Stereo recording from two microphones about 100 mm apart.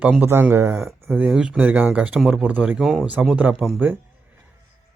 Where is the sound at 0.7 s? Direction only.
5° right (ahead or behind).